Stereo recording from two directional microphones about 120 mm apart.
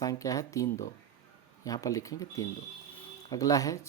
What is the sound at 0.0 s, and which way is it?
Speech, 30° left (ahead or behind).